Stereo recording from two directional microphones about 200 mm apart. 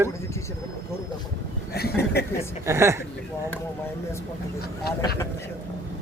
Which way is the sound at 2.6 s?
15° right (ahead or behind).